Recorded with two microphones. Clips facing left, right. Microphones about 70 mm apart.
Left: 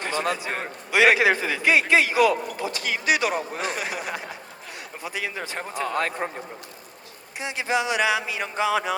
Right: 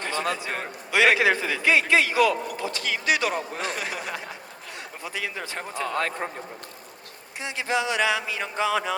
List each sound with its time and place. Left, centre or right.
0.4 s speech: centre
7.3 s speech: centre